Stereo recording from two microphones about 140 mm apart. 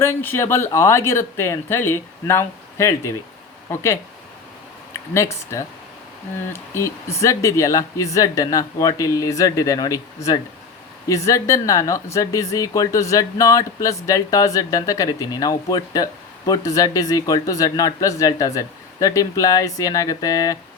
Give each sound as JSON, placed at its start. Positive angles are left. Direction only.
{"t": 0.0, "sound": "speech", "side_deg": 15}
{"t": 5.1, "sound": "speech", "side_deg": 20}